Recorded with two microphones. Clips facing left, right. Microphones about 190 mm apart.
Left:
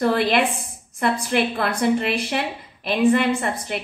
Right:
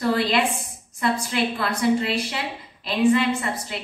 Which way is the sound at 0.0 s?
55° left (ahead or behind).